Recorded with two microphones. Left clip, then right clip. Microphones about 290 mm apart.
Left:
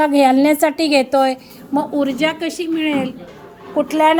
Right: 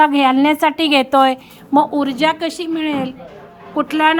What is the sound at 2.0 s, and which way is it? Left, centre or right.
A woman's voice, centre.